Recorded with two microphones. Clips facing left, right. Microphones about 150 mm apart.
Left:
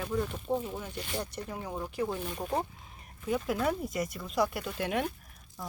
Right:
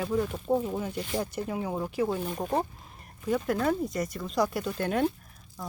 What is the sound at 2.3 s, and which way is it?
Speech, 30° right (ahead or behind).